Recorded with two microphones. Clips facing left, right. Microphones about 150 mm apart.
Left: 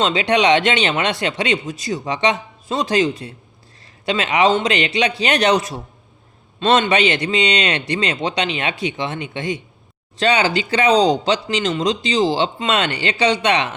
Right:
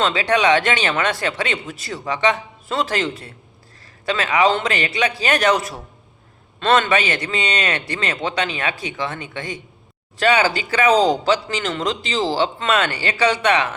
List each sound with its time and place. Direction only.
0.0 s speech: 20° left (ahead or behind)